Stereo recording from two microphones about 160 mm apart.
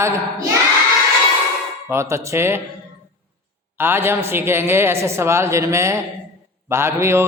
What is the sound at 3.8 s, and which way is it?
A woman's voice, 15° right (ahead or behind).